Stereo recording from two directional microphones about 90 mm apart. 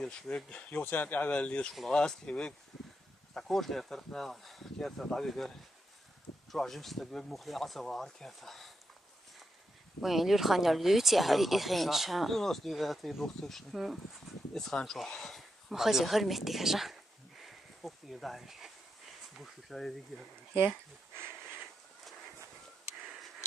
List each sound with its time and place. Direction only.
0.0 s speech: 10° left (ahead or behind)
6.5 s speech: centre (ahead or behind)
9.9 s speech: centre (ahead or behind)
21.2 s a sound: 25° right (ahead or behind)